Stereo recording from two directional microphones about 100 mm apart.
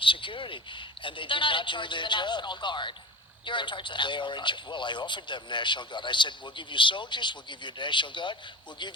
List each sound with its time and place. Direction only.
0.0 s a woman's voice: 60° left (ahead or behind)